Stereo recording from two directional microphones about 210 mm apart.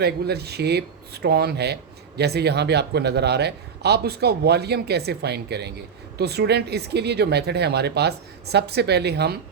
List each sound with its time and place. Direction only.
0.0 s speech: 50° right (ahead or behind)